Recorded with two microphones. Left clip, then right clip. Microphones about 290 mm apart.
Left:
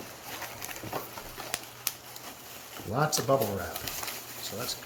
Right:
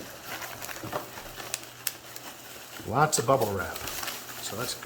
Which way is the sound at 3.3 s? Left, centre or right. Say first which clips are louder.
Right 1 dB; centre.